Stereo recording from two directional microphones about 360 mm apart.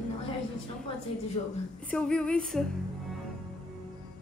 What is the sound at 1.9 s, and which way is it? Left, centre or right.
Speech, centre.